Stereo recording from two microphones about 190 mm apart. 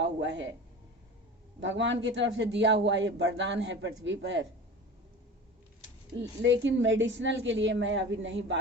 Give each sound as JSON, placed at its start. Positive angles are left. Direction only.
{"t": 0.0, "sound": "speech", "side_deg": -75}
{"t": 1.6, "sound": "speech", "side_deg": -75}
{"t": 6.4, "sound": "speech", "side_deg": -80}